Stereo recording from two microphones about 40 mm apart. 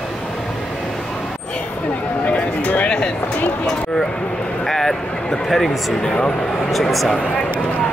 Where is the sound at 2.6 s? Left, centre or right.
Left.